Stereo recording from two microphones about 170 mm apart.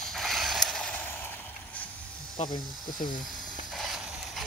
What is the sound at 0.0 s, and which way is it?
Mechanisms, centre (ahead or behind).